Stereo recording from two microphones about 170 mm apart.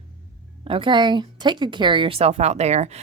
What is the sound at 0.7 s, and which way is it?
A woman's voice, 30° right (ahead or behind).